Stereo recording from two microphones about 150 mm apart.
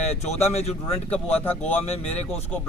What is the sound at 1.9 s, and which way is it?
Speech, 45° left (ahead or behind).